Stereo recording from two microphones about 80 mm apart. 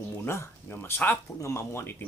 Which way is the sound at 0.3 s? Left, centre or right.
Left.